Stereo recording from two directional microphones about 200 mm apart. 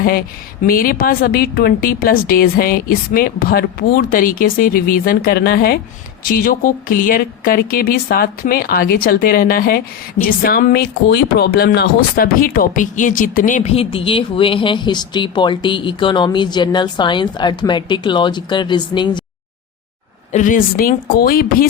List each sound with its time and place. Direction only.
0.0 s speech: 45° left (ahead or behind); by 19.2 s 20° left (ahead or behind)
20.3 s speech: 40° left (ahead or behind)